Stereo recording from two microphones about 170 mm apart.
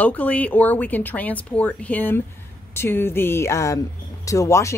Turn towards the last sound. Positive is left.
turn(degrees=15)  # may be behind; listen again after turning